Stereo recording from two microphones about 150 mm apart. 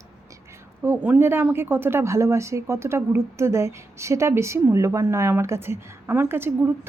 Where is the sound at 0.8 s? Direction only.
10° right (ahead or behind).